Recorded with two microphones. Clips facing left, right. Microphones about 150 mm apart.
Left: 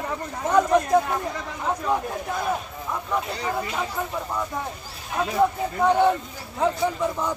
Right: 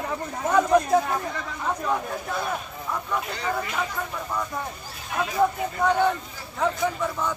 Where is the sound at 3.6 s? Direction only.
20° left (ahead or behind).